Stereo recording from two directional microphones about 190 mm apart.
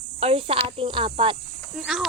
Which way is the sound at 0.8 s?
25° right (ahead or behind).